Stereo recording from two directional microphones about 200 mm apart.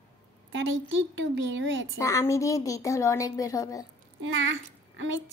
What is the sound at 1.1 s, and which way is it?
Speech, 65° right (ahead or behind).